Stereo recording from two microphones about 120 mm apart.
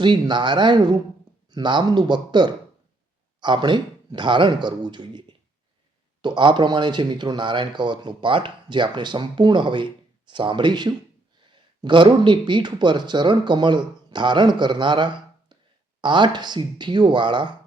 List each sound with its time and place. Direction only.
0.0 s speech: 40° right (ahead or behind)
6.2 s speech: 40° right (ahead or behind)